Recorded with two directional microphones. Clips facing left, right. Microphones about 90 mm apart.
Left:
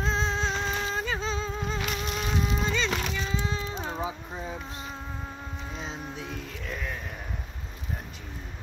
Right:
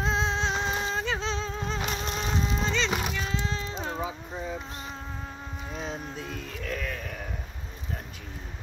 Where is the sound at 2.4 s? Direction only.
10° left (ahead or behind).